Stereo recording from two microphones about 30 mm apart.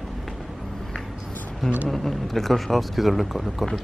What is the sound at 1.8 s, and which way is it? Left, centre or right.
Speech, centre.